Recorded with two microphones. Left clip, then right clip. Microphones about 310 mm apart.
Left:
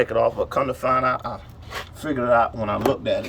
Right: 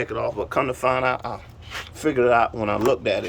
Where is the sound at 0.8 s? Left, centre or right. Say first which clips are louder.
Left 2 dB; centre.